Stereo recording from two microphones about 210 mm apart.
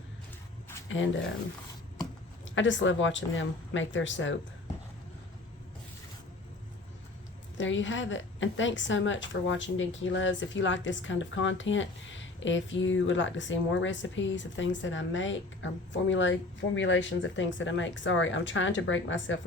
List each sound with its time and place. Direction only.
0.9 s speech: 65° left (ahead or behind)
2.4 s a woman's voice: 60° left (ahead or behind)
7.6 s a woman's voice: 60° left (ahead or behind)